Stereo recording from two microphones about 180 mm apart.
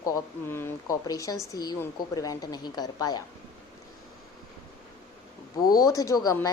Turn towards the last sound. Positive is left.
turn(degrees=20)  # may be behind; listen again after turning